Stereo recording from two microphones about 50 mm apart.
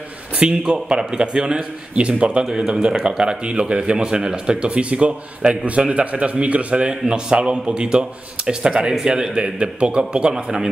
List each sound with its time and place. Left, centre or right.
0.4 s speech: centre
2.4 s a man's voice: centre